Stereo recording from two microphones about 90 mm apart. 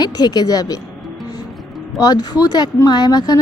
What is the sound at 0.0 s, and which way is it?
Speech, 50° left (ahead or behind).